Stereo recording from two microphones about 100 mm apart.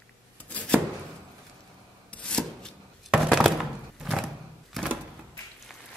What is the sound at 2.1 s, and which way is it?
Filing, 10° left (ahead or behind).